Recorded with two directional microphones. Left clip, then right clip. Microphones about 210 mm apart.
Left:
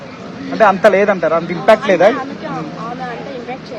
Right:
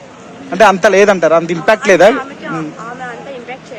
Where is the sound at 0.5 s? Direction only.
65° right (ahead or behind).